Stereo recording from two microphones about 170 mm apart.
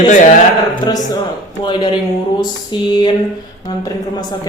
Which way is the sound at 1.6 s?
25° left (ahead or behind).